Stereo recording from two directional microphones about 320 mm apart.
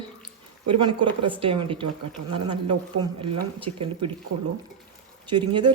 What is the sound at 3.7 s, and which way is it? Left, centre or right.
Speech, right.